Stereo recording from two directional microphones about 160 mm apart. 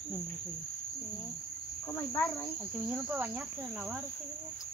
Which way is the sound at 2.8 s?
10° right (ahead or behind).